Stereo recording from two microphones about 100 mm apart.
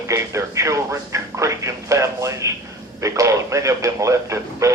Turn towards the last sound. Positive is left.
turn(degrees=-30)  # may be behind; listen again after turning